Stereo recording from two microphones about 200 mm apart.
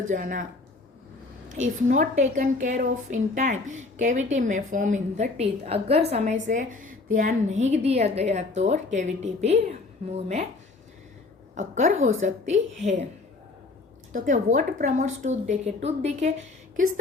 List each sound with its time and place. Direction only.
0.0 s a woman's voice: 40° right (ahead or behind)
1.9 s a woman's voice: 35° right (ahead or behind)
11.5 s a woman's voice: 40° right (ahead or behind)
14.1 s a woman's voice: 40° right (ahead or behind)